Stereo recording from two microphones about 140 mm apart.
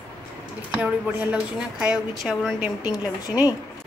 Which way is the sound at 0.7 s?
10° right (ahead or behind).